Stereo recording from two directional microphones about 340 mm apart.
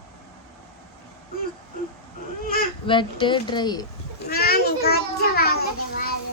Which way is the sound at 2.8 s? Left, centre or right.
Centre.